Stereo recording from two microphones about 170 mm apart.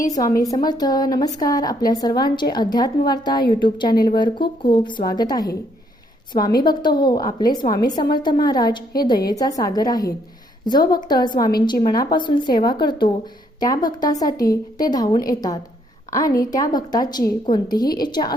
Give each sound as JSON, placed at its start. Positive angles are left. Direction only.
{"t": 0.1, "sound": "a woman's voice", "side_deg": 20}